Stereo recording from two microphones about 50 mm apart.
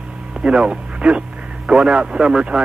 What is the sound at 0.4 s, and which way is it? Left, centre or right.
Speech, centre.